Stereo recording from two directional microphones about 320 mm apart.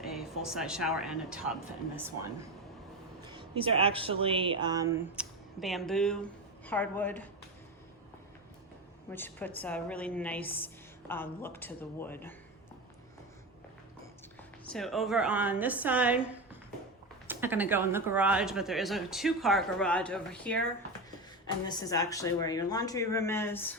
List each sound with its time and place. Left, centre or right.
0.0 s speech: centre
3.2 s speech: centre
5.1 s speech: centre
9.0 s speech: centre
14.7 s speech: centre